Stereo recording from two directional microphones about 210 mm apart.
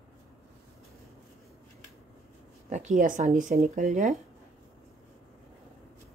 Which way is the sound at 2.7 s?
35° right (ahead or behind).